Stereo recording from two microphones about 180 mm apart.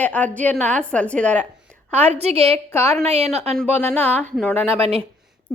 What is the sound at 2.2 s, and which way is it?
Speech, 35° right (ahead or behind).